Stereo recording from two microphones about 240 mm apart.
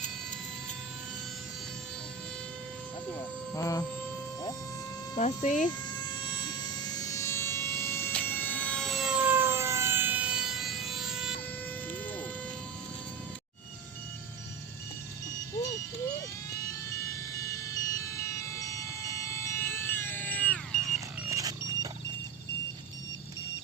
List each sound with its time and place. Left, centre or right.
3.2 s speech: centre
5.1 s speech: left
5.6 s vehicle: centre
16.9 s vehicle: centre
21.2 s a sound: centre